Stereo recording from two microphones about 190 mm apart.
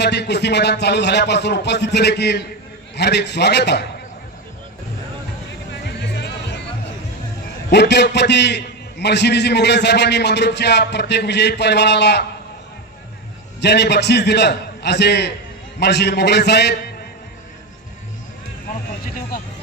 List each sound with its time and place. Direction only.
0.0 s a man's voice: 60° left (ahead or behind)
5.8 s music: 60° left (ahead or behind)
7.7 s a man's voice: 65° left (ahead or behind)
13.6 s a man's voice: 60° left (ahead or behind)